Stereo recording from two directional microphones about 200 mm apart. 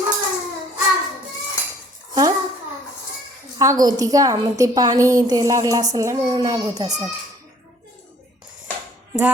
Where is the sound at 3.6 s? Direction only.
15° right (ahead or behind).